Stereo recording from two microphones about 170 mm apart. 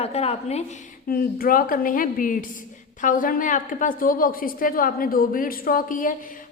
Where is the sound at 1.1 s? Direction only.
60° left (ahead or behind).